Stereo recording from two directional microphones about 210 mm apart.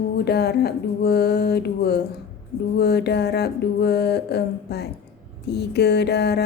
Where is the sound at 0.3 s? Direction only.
50° left (ahead or behind).